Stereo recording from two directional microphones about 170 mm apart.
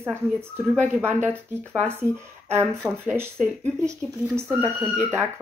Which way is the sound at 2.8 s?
15° right (ahead or behind).